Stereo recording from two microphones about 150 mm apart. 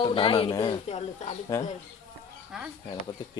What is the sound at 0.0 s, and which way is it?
Speech, 35° left (ahead or behind).